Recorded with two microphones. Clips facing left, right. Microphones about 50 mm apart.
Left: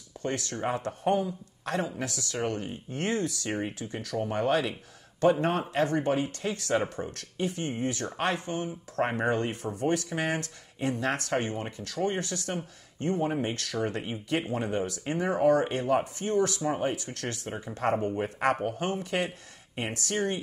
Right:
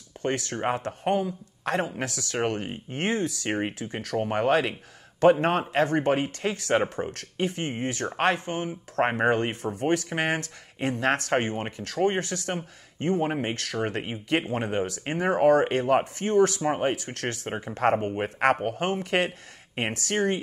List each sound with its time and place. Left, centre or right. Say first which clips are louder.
0.2 s speech: right 4 dB; right
1.0 s speech: right 1 dB; right
2.9 s speech: right 2 dB; right
6.5 s speech: right 4 dB; right
7.2 s speech: right 1 dB; right